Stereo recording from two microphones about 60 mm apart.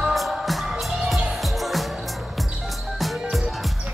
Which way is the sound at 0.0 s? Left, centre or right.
Centre.